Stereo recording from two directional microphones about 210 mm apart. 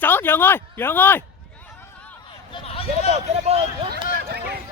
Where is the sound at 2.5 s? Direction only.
25° left (ahead or behind).